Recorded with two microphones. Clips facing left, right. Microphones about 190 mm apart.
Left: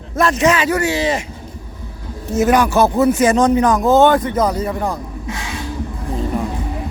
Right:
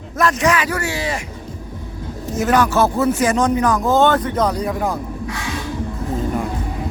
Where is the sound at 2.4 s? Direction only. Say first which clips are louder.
Left 2 dB; 15° left (ahead or behind); by 4.9 s centre (ahead or behind).